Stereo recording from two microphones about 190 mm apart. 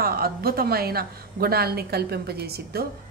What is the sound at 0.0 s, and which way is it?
A woman's voice, 55° right (ahead or behind).